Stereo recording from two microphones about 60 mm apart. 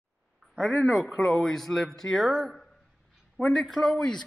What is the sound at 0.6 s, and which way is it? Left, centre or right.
Speech, centre.